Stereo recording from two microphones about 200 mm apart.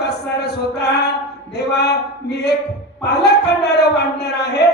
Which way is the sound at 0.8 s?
55° left (ahead or behind).